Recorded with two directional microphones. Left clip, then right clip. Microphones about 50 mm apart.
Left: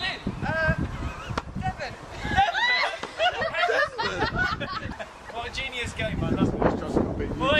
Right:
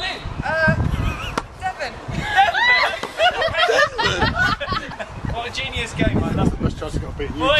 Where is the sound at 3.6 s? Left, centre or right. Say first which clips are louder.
Right 7 dB; right.